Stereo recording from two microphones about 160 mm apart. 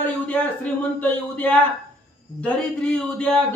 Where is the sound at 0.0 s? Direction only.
10° left (ahead or behind).